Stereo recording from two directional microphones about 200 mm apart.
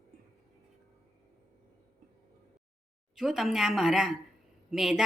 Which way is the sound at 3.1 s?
Centre (ahead or behind).